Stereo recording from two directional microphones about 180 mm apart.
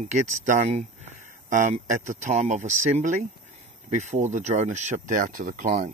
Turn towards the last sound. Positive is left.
turn(degrees=-45)  # may be behind; listen again after turning